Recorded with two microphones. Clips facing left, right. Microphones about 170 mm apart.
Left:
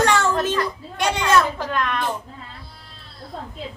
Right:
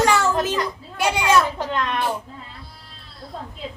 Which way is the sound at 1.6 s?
20° right (ahead or behind).